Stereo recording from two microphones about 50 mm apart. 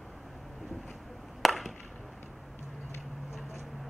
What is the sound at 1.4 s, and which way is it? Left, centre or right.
Chop, centre.